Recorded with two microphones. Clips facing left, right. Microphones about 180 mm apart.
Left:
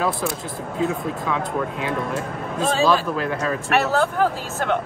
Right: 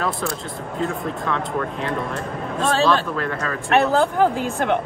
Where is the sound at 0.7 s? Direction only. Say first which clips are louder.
Left 1 dB; 5° left (ahead or behind).